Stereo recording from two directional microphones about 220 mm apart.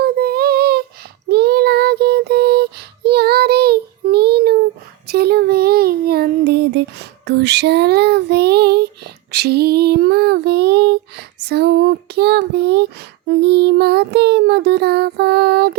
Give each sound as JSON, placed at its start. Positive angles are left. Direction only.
{"t": 0.0, "sound": "child singing", "side_deg": -45}
{"t": 9.3, "sound": "female singing", "side_deg": -45}